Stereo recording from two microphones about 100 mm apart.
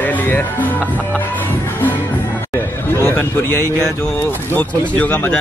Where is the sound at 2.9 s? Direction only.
20° left (ahead or behind).